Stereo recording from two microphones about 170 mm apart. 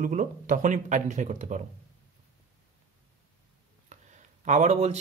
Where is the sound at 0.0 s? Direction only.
50° right (ahead or behind).